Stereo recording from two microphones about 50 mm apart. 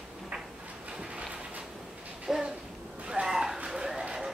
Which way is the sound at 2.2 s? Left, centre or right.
Centre.